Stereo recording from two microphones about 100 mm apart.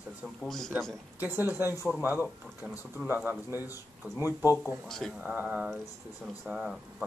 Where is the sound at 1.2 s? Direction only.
20° right (ahead or behind).